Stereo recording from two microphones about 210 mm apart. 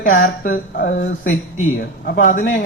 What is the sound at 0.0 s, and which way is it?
A man's voice, 40° left (ahead or behind).